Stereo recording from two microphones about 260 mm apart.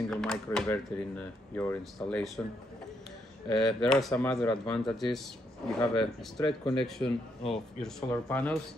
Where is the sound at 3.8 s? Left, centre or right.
Centre.